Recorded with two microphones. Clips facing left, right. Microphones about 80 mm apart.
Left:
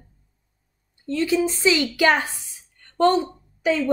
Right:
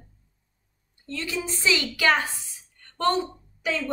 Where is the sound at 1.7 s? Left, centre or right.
Left.